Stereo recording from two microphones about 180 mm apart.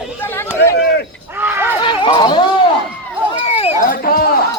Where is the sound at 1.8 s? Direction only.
25° left (ahead or behind).